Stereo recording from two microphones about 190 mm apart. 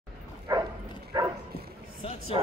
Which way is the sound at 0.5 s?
15° right (ahead or behind).